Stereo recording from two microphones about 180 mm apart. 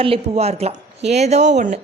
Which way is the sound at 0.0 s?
35° right (ahead or behind).